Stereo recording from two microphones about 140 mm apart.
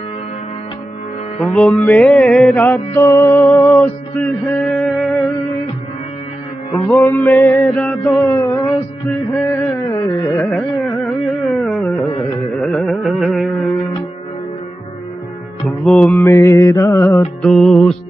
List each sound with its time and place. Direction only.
1.4 s music: 5° left (ahead or behind)
6.7 s music: 15° left (ahead or behind)
8.2 s a sound: 20° left (ahead or behind)
9.5 s carnatic music: 20° left (ahead or behind)
10.5 s carnatic music: 5° left (ahead or behind)
15.6 s music: 5° left (ahead or behind)
16.2 s mantra: 20° left (ahead or behind)
17.4 s music: 5° left (ahead or behind)